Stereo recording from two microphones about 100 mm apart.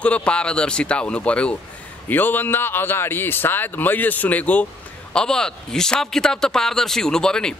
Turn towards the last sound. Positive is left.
turn(degrees=5)  # may be behind; listen again after turning